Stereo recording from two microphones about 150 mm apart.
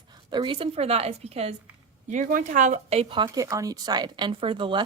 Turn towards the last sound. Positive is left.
turn(degrees=-35)  # may be behind; listen again after turning